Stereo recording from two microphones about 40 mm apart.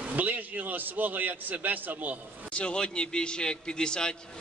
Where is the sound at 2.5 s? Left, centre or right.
Left.